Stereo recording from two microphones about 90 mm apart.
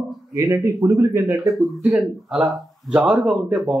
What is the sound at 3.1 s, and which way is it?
Speech, 5° right (ahead or behind).